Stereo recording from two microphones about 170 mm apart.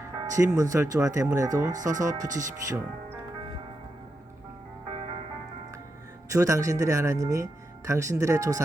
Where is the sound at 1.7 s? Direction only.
50° right (ahead or behind).